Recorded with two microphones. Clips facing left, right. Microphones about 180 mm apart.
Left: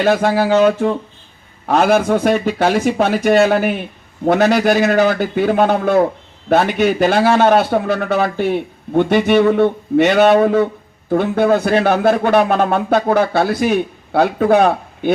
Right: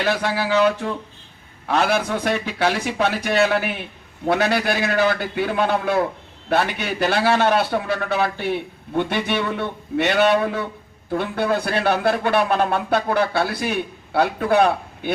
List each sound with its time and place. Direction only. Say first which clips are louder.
0.0 s a man's voice: left 8 dB; 45° left (ahead or behind)